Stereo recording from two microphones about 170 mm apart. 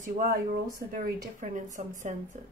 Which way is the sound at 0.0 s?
55° right (ahead or behind).